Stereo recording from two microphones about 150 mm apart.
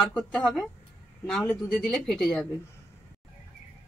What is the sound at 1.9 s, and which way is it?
Speech, centre (ahead or behind).